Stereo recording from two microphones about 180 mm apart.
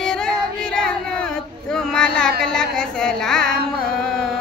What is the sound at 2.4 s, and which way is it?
Music, 5° left (ahead or behind).